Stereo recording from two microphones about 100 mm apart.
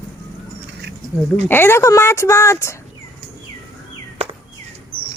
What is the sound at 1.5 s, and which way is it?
A woman's voice, 25° left (ahead or behind).